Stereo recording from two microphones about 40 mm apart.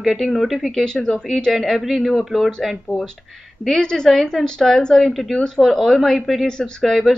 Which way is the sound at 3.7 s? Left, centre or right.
Centre.